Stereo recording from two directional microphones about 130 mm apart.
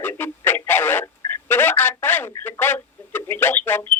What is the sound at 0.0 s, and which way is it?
Radio, 15° left (ahead or behind).